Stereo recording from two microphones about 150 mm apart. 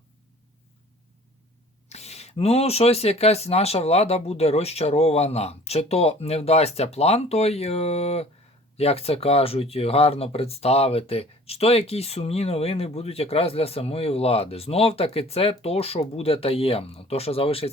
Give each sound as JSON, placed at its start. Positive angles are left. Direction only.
{"t": 1.9, "sound": "speech", "side_deg": 45}